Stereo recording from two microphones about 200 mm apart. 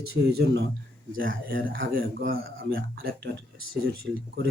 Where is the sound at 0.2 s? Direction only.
50° right (ahead or behind).